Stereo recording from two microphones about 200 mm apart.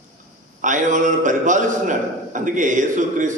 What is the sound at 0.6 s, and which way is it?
A man's voice, 40° right (ahead or behind).